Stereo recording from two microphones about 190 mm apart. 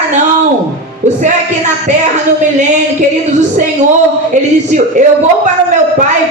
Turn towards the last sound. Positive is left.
turn(degrees=-40)  # may be behind; listen again after turning